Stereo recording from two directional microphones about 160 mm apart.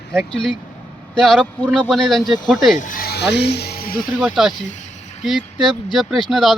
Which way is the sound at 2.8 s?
60° left (ahead or behind).